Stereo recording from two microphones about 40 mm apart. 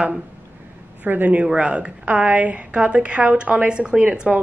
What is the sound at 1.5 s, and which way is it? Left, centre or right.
A woman's voice, right.